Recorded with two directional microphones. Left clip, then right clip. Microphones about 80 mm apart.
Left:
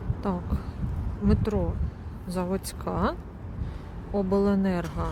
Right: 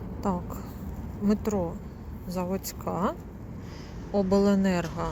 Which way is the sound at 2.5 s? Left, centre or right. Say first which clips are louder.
Left 1 dB; left.